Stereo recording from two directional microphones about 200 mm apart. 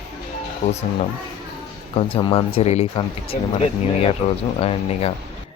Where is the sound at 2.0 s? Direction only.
25° left (ahead or behind).